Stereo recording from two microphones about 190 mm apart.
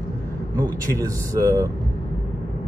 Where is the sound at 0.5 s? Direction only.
15° right (ahead or behind).